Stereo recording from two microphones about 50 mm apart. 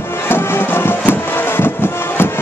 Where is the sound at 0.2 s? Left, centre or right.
Left.